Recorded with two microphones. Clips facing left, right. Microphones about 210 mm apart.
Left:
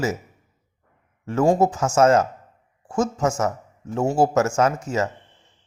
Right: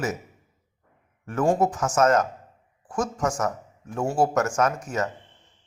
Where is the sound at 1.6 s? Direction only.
25° left (ahead or behind).